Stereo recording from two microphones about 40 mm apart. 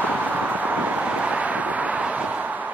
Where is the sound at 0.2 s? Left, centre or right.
Right.